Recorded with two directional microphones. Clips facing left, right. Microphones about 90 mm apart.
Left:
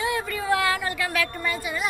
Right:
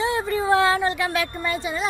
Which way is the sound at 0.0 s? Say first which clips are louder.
Right 4 dB; 25° right (ahead or behind).